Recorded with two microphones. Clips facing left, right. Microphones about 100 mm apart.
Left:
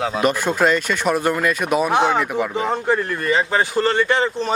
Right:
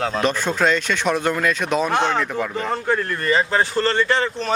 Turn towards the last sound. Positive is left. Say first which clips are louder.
# left 2 dB
turn(degrees=15)  # may be behind; listen again after turning